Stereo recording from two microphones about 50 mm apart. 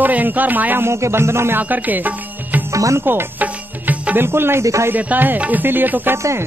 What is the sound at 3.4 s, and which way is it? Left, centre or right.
Music, right.